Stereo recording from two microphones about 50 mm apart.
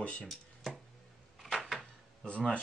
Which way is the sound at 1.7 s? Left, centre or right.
Left.